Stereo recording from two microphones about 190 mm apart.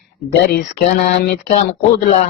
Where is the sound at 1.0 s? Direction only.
55° left (ahead or behind).